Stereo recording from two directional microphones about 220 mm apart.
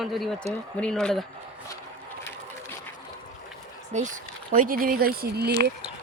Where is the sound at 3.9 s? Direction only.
30° right (ahead or behind).